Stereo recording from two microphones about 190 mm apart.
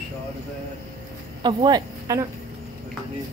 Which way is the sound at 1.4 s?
20° right (ahead or behind).